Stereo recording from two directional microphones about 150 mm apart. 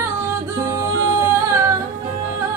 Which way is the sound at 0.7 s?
20° right (ahead or behind).